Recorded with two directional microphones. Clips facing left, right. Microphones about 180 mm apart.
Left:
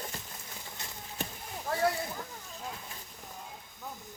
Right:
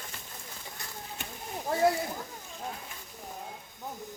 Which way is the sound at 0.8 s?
20° left (ahead or behind).